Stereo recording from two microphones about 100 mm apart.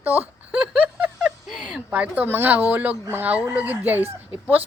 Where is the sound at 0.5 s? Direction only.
10° right (ahead or behind).